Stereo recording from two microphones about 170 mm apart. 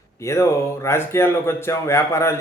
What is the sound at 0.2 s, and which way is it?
A man's voice, 15° left (ahead or behind).